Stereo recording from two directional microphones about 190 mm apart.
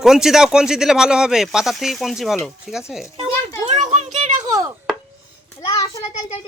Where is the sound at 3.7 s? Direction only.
35° right (ahead or behind).